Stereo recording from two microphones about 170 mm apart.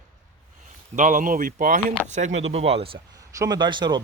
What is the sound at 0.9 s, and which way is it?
Speech, 50° right (ahead or behind).